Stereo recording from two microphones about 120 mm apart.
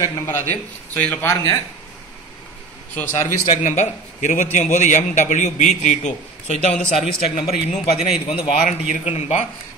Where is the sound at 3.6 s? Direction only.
90° left; by 9.5 s 70° left (ahead or behind).